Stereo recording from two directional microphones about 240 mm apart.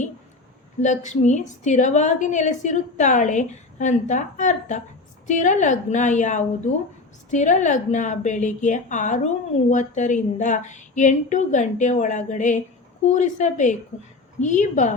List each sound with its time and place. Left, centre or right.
0.8 s a woman's voice: left